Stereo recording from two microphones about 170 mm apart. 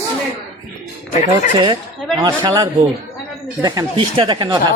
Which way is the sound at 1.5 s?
30° right (ahead or behind).